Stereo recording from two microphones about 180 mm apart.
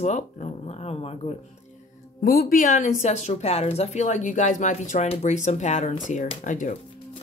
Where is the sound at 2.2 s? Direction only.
50° left (ahead or behind).